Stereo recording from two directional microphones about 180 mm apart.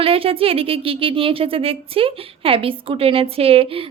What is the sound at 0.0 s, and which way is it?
Speech, 30° right (ahead or behind).